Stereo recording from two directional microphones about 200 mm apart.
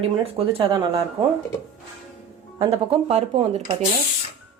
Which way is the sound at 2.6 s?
25° right (ahead or behind).